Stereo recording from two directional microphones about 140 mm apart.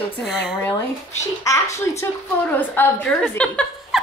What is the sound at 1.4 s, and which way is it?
A child's voice, 20° left (ahead or behind).